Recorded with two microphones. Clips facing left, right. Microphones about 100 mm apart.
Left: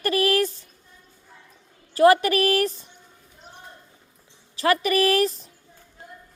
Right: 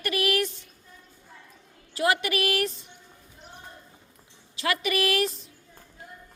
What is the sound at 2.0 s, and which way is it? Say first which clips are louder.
Speech: left 9 dB; 40° left (ahead or behind).